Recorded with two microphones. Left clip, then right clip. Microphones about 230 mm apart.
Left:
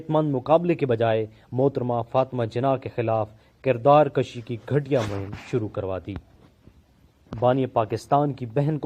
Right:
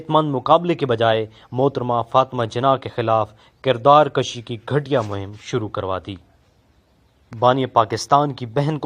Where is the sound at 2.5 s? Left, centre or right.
Right.